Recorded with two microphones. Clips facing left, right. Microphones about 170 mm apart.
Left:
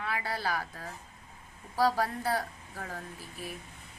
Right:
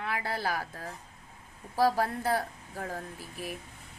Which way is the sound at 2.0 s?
45° right (ahead or behind).